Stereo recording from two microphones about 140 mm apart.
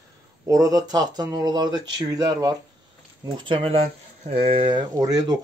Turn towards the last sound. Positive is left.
turn(degrees=-25)  # may be behind; listen again after turning